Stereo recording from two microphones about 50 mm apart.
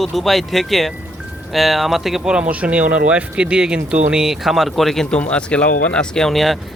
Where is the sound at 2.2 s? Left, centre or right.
Centre.